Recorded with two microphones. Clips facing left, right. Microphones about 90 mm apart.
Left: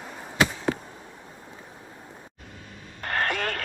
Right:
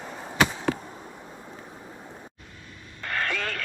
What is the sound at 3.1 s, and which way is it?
Radio, 35° left (ahead or behind).